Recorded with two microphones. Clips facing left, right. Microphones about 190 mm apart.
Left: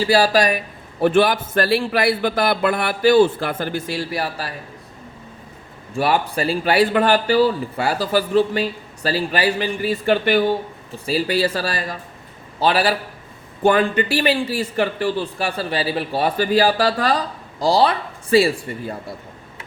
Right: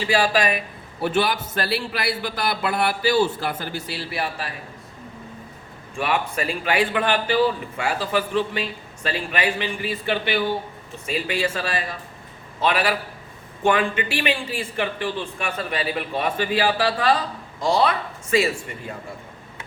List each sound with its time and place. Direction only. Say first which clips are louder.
0.0 s a man's voice: left 4 dB; 40° left (ahead or behind)
1.0 s a man's voice: left 6 dB; 50° left (ahead or behind)
6.0 s a man's voice: left 5 dB; 35° left (ahead or behind)
10.9 s a man's voice: left 6 dB; 35° left (ahead or behind)